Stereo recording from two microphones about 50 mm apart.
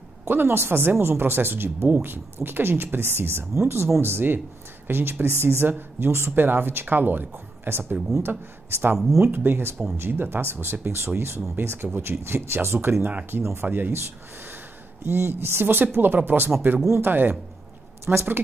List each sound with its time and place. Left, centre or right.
0.3 s a woman's voice: right
13.0 s speech: right
13.4 s speech: right
13.7 s speech: right
15.0 s a woman's voice: right
18.1 s a woman's voice: right